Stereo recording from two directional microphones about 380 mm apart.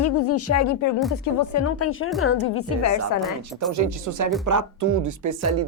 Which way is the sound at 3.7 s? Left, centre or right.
Right.